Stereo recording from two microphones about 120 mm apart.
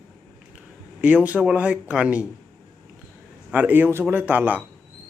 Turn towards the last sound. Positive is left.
turn(degrees=-15)  # may be behind; listen again after turning